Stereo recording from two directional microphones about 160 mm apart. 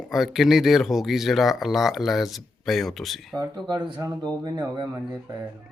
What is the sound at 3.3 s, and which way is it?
Speech, 25° right (ahead or behind).